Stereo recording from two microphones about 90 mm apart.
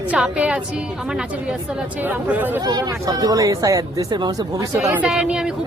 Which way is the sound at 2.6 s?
50° right (ahead or behind).